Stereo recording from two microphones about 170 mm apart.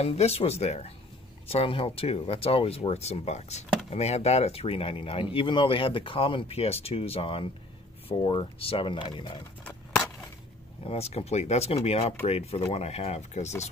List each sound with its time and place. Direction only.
0.0 s speech: 40° left (ahead or behind)
10.8 s speech: 35° left (ahead or behind)